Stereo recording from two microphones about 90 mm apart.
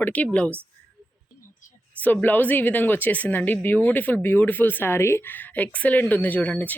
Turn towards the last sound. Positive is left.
turn(degrees=15)  # may be behind; listen again after turning